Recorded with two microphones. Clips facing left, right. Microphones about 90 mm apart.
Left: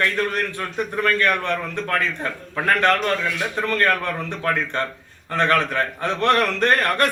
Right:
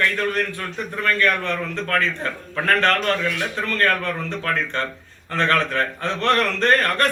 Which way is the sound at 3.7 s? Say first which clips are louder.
Even; 20° left (ahead or behind).